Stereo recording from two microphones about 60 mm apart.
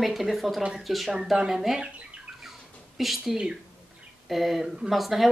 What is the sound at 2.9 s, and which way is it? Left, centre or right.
Speech, centre.